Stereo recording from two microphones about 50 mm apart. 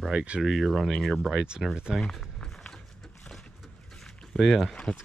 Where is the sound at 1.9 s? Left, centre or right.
Centre.